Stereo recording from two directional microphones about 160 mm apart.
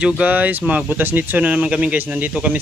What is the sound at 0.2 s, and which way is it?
Speech, 10° right (ahead or behind).